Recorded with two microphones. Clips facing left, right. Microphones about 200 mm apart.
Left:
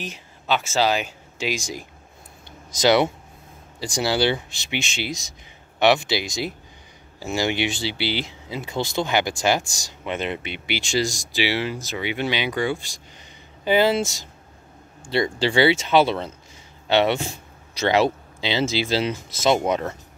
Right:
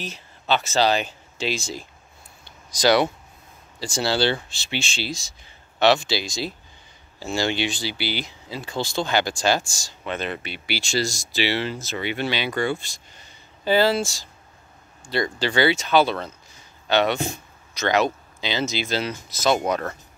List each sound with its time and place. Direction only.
0.0 s speech: 10° left (ahead or behind)